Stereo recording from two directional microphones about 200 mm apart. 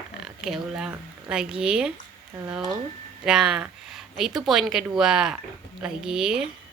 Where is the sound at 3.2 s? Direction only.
5° right (ahead or behind).